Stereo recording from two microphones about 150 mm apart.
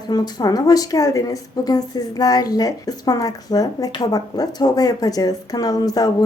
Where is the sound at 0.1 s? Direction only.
25° left (ahead or behind).